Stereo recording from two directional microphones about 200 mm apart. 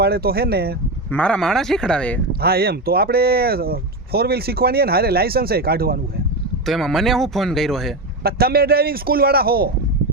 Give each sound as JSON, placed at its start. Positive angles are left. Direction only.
{"t": 0.0, "sound": "speech", "side_deg": -50}
{"t": 1.1, "sound": "speech", "side_deg": 5}
{"t": 2.4, "sound": "speech", "side_deg": -50}
{"t": 6.7, "sound": "speech", "side_deg": 0}
{"t": 8.2, "sound": "speech", "side_deg": -50}